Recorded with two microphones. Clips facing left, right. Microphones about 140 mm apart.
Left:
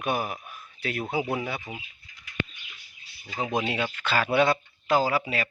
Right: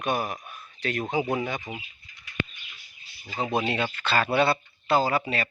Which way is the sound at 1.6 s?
20° right (ahead or behind).